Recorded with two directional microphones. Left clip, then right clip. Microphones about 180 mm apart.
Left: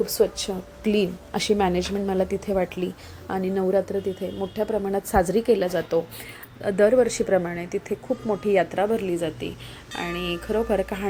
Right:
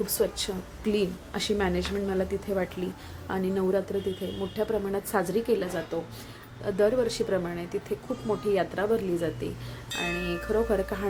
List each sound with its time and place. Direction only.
0.0 s speech: 20° left (ahead or behind)